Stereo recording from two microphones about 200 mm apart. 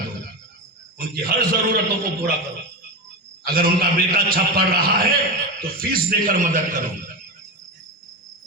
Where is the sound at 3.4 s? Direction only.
45° right (ahead or behind).